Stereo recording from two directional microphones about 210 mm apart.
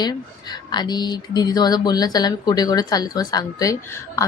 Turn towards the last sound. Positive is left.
turn(degrees=15)  # may be behind; listen again after turning